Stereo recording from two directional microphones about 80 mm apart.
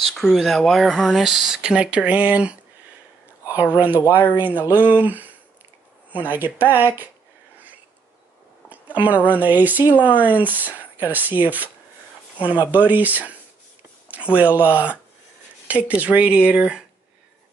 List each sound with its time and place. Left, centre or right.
0.0 s speech: centre
3.7 s speech: right
8.9 s speech: right
12.7 s speech: right